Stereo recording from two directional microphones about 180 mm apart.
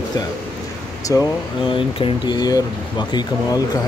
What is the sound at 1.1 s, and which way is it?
Speech, 25° left (ahead or behind).